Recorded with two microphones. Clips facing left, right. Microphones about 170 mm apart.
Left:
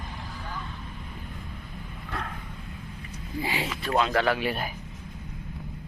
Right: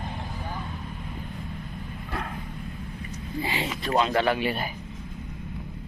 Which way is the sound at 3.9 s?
5° right (ahead or behind).